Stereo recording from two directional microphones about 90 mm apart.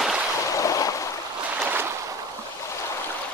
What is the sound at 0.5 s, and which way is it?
Stream, 40° left (ahead or behind).